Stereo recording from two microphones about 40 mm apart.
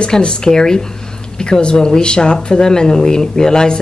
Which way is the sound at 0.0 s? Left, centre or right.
Left.